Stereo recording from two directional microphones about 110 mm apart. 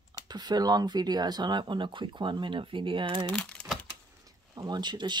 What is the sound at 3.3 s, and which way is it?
Crumpling, 10° left (ahead or behind).